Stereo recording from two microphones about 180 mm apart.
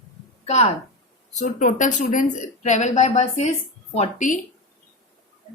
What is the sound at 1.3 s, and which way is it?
Speech, 40° left (ahead or behind).